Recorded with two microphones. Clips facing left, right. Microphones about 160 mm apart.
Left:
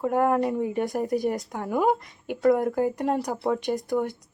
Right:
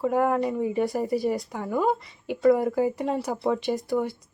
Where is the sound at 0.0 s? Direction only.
Centre (ahead or behind).